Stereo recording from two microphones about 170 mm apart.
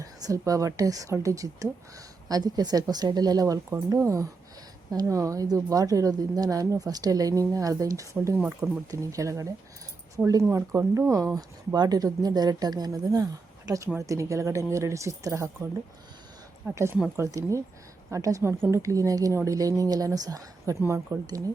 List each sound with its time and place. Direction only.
0.0 s speech: 20° right (ahead or behind)